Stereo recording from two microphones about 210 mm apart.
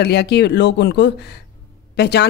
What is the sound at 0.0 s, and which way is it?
A woman's voice, 50° left (ahead or behind).